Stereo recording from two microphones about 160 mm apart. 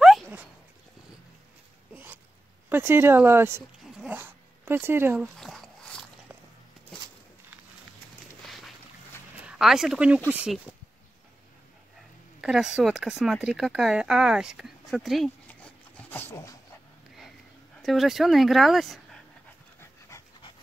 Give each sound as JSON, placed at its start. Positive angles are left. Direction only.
{"t": 0.0, "sound": "a sound", "side_deg": -5}
{"t": 2.7, "sound": "speech", "side_deg": -15}
{"t": 3.8, "sound": "dog", "side_deg": -5}
{"t": 5.4, "sound": "a sound", "side_deg": 0}
{"t": 8.5, "sound": "boat", "side_deg": 0}
{"t": 9.5, "sound": "a woman's voice", "side_deg": 0}
{"t": 12.4, "sound": "speech", "side_deg": -5}
{"t": 17.8, "sound": "a woman's voice", "side_deg": 0}
{"t": 19.8, "sound": "dog", "side_deg": 20}